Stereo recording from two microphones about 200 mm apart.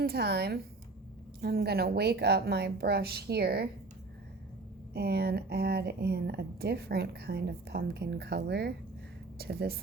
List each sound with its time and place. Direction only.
0.0 s speech: 50° right (ahead or behind)
4.9 s speech: 55° right (ahead or behind)